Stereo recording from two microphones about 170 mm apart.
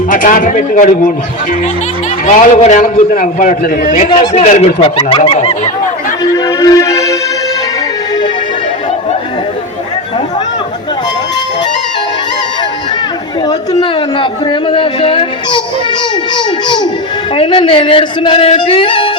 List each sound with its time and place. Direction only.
0.1 s a man's voice: 50° left (ahead or behind)
2.2 s a man's voice: 45° left (ahead or behind)
4.2 s music: 45° left (ahead or behind)
4.9 s music: 30° left (ahead or behind)
6.3 s music: 20° left (ahead or behind)
14.7 s speech: 30° left (ahead or behind)
17.3 s music: 30° left (ahead or behind)